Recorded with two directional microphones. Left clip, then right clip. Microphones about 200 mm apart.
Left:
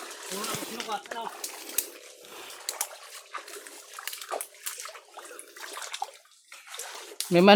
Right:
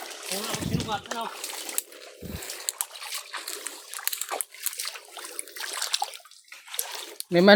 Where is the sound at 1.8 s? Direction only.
60° right (ahead or behind).